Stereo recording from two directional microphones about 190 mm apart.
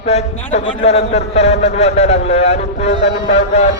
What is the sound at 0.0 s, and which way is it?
A man's voice, 35° left (ahead or behind).